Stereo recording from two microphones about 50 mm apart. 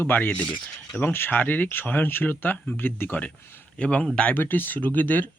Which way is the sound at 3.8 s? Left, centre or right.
Left.